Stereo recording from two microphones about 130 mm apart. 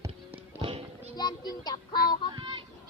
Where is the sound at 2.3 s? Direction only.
40° right (ahead or behind).